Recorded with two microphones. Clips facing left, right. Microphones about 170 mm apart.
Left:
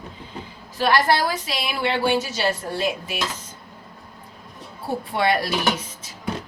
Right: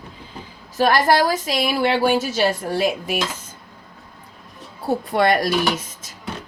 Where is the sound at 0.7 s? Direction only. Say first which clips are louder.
Right 3 dB; 45° right (ahead or behind).